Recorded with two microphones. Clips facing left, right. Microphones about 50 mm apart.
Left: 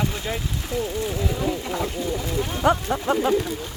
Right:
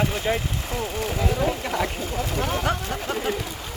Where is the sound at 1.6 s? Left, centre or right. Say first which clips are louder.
Right 1 dB; right.